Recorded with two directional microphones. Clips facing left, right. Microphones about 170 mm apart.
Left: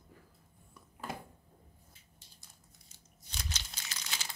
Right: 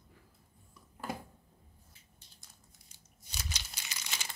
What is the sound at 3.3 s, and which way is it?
Crumpling, 15° right (ahead or behind).